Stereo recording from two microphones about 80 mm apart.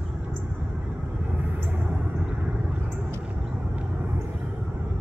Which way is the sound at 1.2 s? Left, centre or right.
Centre.